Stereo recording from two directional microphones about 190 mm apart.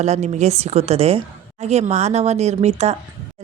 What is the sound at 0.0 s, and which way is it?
Speech, 35° right (ahead or behind).